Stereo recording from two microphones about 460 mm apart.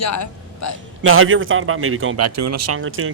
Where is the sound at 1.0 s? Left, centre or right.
Right.